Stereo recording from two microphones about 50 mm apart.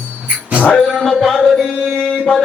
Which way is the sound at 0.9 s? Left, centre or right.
Centre.